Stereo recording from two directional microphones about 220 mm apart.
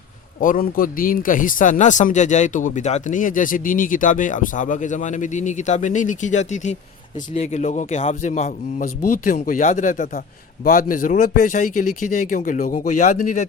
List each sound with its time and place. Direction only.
0.3 s a man's voice: 40° left (ahead or behind)